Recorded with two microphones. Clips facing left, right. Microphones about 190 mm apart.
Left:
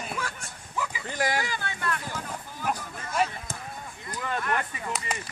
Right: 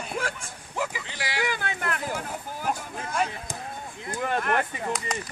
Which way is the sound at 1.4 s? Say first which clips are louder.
Right 3 dB; 60° right (ahead or behind).